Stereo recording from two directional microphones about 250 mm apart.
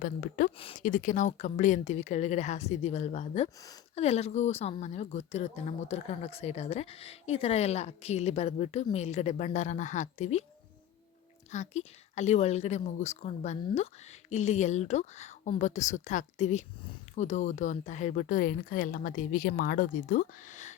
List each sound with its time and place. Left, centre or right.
0.0 s a woman's voice: left
0.5 s speech: left
11.5 s a woman's voice: left